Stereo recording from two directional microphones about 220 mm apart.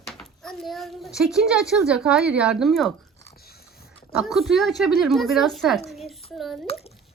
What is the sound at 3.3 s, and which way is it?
Biting, 45° left (ahead or behind).